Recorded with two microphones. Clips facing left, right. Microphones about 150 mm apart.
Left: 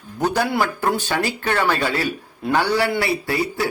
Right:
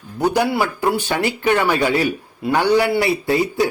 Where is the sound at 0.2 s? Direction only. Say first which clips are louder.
Right 2 dB; 10° right (ahead or behind).